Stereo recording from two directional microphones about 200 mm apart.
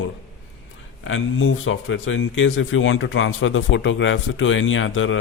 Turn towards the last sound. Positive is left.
turn(degrees=80)